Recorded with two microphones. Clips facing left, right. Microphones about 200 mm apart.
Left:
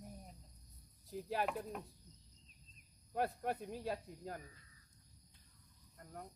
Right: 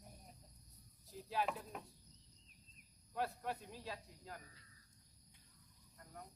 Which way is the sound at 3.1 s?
50° left (ahead or behind).